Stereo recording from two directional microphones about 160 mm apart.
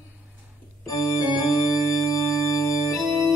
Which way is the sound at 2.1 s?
20° left (ahead or behind).